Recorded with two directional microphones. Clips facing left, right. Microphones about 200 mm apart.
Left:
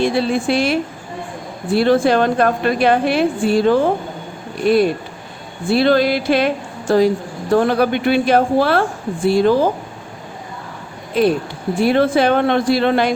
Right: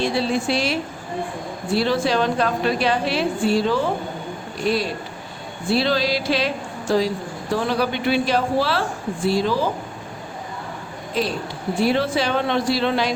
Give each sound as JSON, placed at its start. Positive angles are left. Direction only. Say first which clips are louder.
{"t": 0.0, "sound": "a woman's voice", "louder": "left 4 dB", "side_deg": 55}
{"t": 11.1, "sound": "a woman's voice", "louder": "left 8 dB", "side_deg": 55}